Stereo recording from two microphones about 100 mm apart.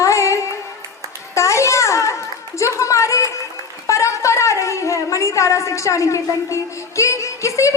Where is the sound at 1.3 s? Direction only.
30° left (ahead or behind).